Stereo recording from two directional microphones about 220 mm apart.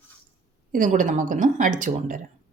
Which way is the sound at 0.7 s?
35° right (ahead or behind).